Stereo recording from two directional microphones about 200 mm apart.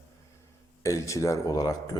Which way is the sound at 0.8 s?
15° left (ahead or behind).